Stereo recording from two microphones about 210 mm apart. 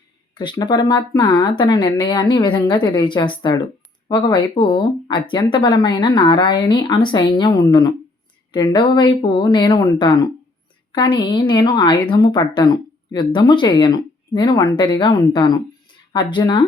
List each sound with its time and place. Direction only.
0.3 s a woman's voice: 20° left (ahead or behind)